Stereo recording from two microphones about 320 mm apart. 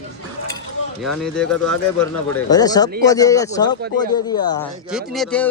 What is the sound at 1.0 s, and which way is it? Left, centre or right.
Speech, centre.